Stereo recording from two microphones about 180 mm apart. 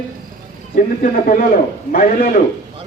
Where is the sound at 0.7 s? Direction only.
50° left (ahead or behind).